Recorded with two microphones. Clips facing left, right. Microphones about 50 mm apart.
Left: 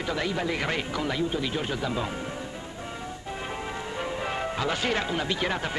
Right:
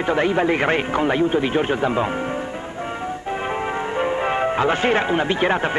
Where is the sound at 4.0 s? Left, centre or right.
Right.